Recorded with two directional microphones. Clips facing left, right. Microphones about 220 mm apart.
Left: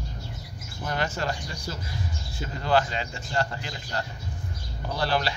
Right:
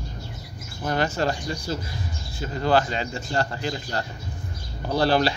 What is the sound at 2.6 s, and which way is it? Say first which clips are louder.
Speech: right 3 dB; 40° right (ahead or behind).